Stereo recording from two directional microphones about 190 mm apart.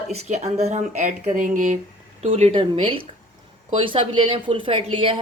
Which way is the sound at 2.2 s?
35° right (ahead or behind).